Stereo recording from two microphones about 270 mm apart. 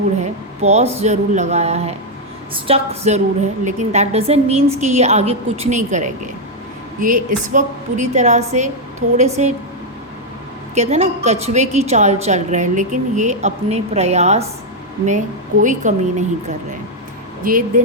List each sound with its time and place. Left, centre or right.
0.6 s a woman's voice: right
10.8 s a woman's voice: right
15.6 s a woman's voice: right